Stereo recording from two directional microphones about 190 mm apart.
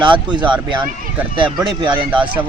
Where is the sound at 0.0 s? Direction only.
25° right (ahead or behind).